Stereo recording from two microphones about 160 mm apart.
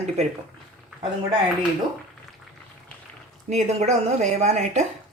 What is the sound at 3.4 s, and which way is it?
Speech, 45° right (ahead or behind).